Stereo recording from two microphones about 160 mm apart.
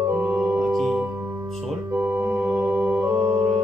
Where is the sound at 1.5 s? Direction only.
Centre (ahead or behind).